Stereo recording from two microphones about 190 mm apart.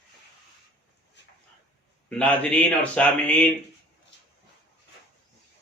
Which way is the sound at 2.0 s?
5° left (ahead or behind).